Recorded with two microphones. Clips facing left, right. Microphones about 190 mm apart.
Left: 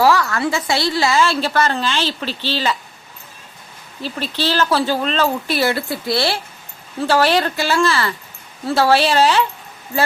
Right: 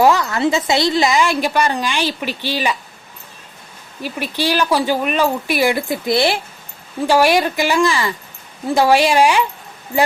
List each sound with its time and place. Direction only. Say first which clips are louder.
0.0 s a woman's voice: right 2 dB; 20° right (ahead or behind)
4.0 s a woman's voice: right 1 dB; 10° right (ahead or behind)